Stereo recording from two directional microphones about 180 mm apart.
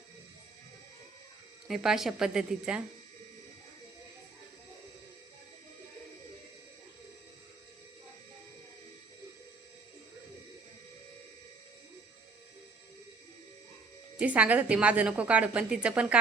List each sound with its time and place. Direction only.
1.6 s speech: centre (ahead or behind)
14.2 s a woman's voice: 10° right (ahead or behind)